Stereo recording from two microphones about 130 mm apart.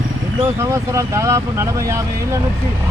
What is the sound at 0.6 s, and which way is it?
Speech, 20° right (ahead or behind).